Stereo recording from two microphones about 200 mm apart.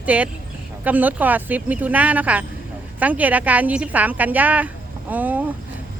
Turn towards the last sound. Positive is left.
turn(degrees=-10)  # may be behind; listen again after turning